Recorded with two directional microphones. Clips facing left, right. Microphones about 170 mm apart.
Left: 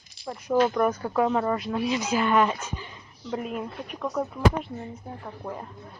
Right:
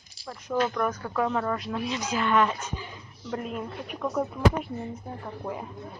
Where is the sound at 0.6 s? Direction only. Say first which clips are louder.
Left 4 dB; 15° left (ahead or behind).